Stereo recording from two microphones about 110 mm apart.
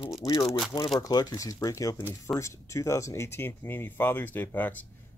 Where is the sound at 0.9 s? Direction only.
35° left (ahead or behind).